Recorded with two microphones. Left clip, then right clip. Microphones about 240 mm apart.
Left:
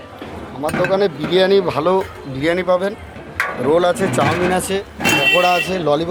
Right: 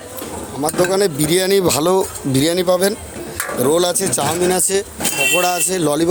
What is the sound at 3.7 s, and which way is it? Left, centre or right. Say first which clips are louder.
Speech: left 1 dB; right.